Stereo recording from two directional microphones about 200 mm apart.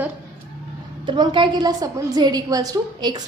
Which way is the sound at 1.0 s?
20° right (ahead or behind).